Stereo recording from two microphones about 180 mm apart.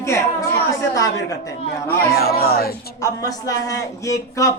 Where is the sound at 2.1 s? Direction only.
55° left (ahead or behind).